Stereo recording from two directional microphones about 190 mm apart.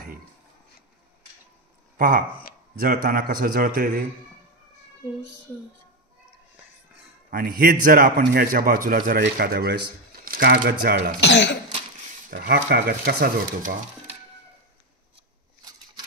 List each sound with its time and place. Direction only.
2.0 s speech: 45° right (ahead or behind)
7.2 s a man's voice: 50° right (ahead or behind)
11.1 s speech: 65° left (ahead or behind)
12.3 s speech: 55° right (ahead or behind)